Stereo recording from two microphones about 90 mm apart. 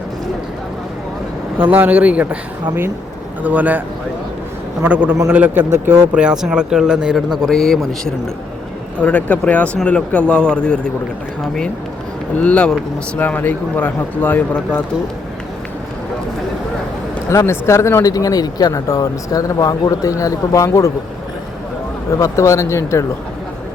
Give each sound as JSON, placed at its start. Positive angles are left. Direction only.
{"t": 1.5, "sound": "speech", "side_deg": -20}
{"t": 3.4, "sound": "speech", "side_deg": -20}
{"t": 6.1, "sound": "speech", "side_deg": -10}
{"t": 9.0, "sound": "a man's voice", "side_deg": 15}
{"t": 12.4, "sound": "a man's voice", "side_deg": 15}
{"t": 17.2, "sound": "speech", "side_deg": 30}
{"t": 18.1, "sound": "speech", "side_deg": 45}
{"t": 22.2, "sound": "speech", "side_deg": 35}